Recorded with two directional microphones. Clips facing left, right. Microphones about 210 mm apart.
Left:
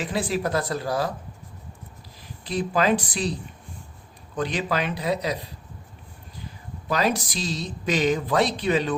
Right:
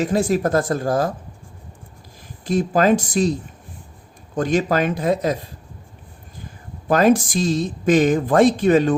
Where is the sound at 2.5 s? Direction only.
45° right (ahead or behind).